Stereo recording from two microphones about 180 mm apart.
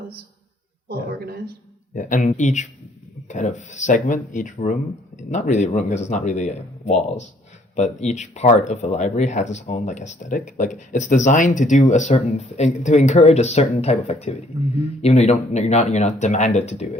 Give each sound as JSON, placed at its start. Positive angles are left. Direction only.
{"t": 0.9, "sound": "speech", "side_deg": -60}
{"t": 2.0, "sound": "speech", "side_deg": 45}